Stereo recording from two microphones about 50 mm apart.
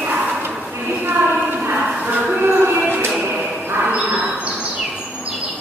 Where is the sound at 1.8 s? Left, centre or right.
Right.